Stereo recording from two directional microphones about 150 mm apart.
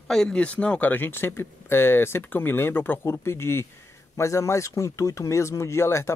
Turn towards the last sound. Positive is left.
turn(degrees=15)  # may be behind; listen again after turning